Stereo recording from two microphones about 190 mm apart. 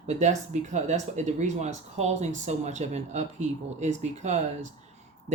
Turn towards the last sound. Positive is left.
turn(degrees=-40)  # may be behind; listen again after turning